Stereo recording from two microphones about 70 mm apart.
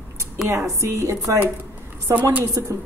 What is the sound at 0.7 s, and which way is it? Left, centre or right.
A woman's voice, right.